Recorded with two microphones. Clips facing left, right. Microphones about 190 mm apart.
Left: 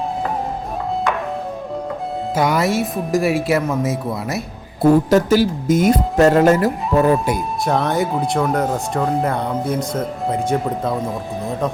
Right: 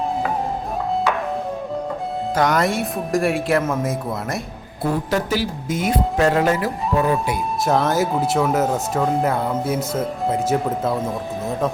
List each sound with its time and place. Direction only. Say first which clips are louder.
2.3 s speech: left 1 dB; 5° left (ahead or behind)
4.8 s speech: left 9 dB; 45° left (ahead or behind)
7.6 s speech: right 1 dB; centre (ahead or behind)